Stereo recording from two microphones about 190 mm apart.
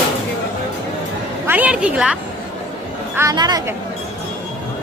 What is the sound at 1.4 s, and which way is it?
Speech, 10° right (ahead or behind).